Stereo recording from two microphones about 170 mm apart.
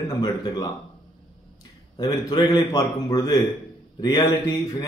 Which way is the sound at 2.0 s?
25° left (ahead or behind).